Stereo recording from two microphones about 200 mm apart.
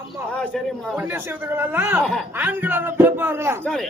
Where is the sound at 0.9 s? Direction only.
10° right (ahead or behind).